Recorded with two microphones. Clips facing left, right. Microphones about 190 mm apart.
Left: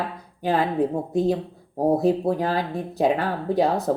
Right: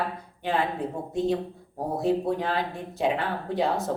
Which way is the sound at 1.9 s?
40° left (ahead or behind).